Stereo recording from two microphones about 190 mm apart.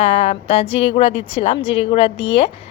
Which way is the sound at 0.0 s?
30° left (ahead or behind).